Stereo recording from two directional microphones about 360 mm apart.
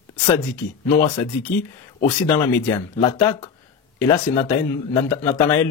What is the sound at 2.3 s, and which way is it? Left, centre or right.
Speech, centre.